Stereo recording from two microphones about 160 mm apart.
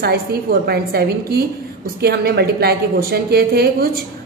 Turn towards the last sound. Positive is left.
turn(degrees=-75)  # may be behind; listen again after turning